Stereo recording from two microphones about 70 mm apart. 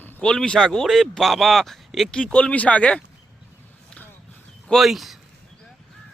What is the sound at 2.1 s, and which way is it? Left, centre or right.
Speech, centre.